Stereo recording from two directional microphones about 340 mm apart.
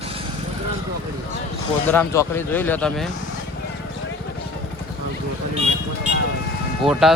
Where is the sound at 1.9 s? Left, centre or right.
Centre.